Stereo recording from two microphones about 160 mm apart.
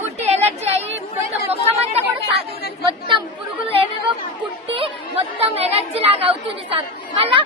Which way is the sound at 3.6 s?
35° right (ahead or behind).